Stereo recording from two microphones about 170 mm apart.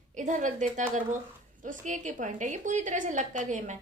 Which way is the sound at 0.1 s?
45° right (ahead or behind).